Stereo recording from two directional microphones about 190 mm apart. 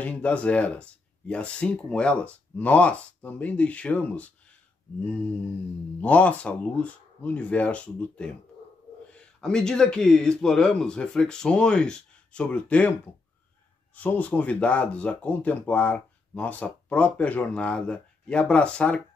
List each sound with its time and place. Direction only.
0.0 s speech: 5° left (ahead or behind)
13.9 s speech: 10° left (ahead or behind)